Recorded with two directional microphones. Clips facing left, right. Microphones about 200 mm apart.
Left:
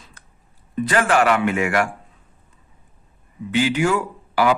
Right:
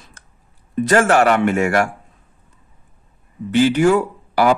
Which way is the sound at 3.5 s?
40° right (ahead or behind).